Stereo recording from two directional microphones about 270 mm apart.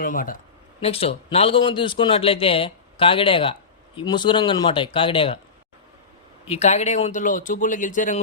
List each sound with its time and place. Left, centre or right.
0.0 s a man's voice: left
6.5 s a man's voice: left